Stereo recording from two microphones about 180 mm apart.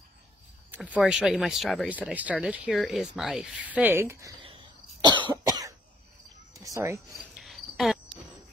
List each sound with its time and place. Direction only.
0.7 s speech: 5° right (ahead or behind)
4.4 s cough: 30° right (ahead or behind)
6.5 s cricket: 20° right (ahead or behind)
7.3 s cricket: centre (ahead or behind)